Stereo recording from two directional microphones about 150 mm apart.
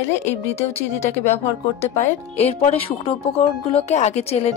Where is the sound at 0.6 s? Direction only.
45° left (ahead or behind).